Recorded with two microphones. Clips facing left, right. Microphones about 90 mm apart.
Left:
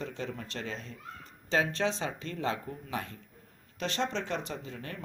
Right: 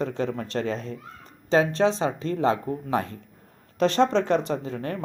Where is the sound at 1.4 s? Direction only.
30° right (ahead or behind); by 5.0 s 45° right (ahead or behind).